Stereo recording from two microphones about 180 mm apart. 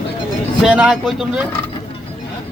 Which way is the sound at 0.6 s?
Centre (ahead or behind).